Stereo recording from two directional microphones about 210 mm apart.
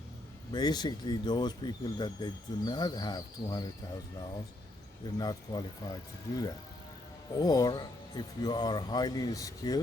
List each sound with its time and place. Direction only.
0.5 s speech: 20° left (ahead or behind)
5.1 s speech: 20° left (ahead or behind)